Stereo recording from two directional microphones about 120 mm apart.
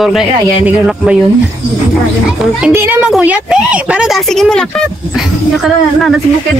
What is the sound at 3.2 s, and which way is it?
A woman's voice, 10° right (ahead or behind).